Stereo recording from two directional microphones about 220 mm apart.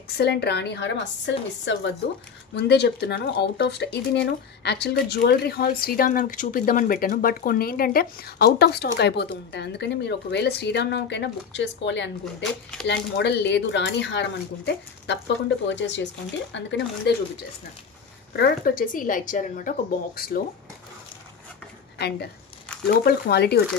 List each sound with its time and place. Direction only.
0.2 s speech: 50° left (ahead or behind)
18.3 s a woman's voice: 45° left (ahead or behind)
21.9 s a woman's voice: 50° left (ahead or behind)